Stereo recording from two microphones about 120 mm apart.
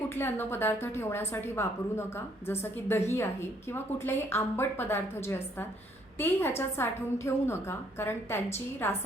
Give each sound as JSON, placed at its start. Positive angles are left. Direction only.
{"t": 0.1, "sound": "a woman's voice", "side_deg": 20}